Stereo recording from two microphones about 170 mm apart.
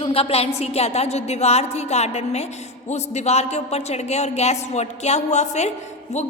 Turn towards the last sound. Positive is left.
turn(degrees=40)  # may be behind; listen again after turning